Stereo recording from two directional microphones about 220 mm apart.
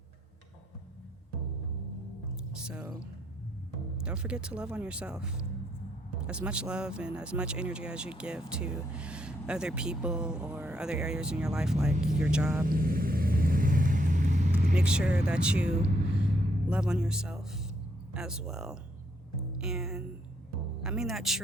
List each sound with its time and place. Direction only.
2.6 s speech: 5° right (ahead or behind)
12.6 s vehicle: 40° right (ahead or behind)
14.8 s speech: 5° right (ahead or behind)